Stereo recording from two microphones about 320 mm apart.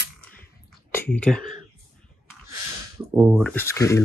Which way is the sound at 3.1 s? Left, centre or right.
Centre.